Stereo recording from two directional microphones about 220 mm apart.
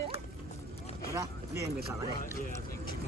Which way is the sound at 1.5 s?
50° right (ahead or behind).